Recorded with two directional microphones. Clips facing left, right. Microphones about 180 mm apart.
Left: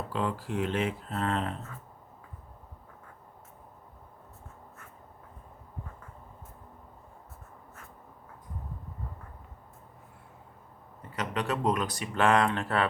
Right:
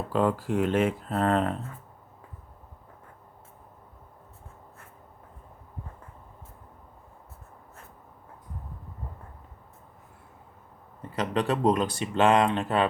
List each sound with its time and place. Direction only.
0.1 s speech: 50° right (ahead or behind)
11.1 s speech: 30° right (ahead or behind)